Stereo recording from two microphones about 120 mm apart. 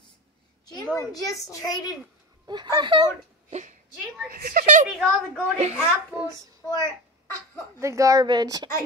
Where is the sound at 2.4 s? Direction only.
35° right (ahead or behind).